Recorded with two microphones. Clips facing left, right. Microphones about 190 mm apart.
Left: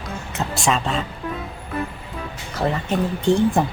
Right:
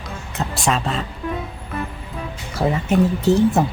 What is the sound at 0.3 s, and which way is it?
Speech, centre (ahead or behind).